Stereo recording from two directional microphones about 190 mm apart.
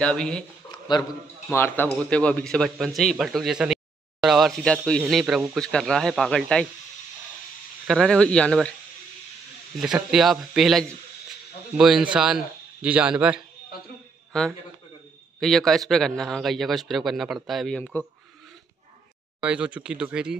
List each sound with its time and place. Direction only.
0.0 s speech: 5° left (ahead or behind)
0.7 s a sound: 20° left (ahead or behind)
1.5 s speech: 10° left (ahead or behind)
7.8 s speech: centre (ahead or behind)
9.8 s speech: centre (ahead or behind)
15.4 s speech: centre (ahead or behind)
19.4 s speech: 5° right (ahead or behind)